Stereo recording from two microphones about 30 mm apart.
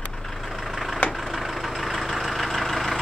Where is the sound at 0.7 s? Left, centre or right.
Centre.